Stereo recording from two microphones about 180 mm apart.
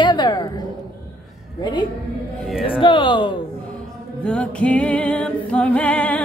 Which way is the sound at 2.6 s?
30° left (ahead or behind).